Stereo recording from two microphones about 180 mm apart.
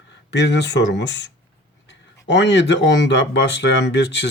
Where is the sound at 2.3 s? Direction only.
75° left (ahead or behind).